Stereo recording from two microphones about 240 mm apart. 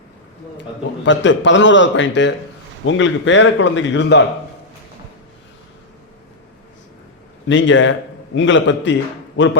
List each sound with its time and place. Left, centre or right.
1.0 s a man's voice: left
7.4 s a man's voice: left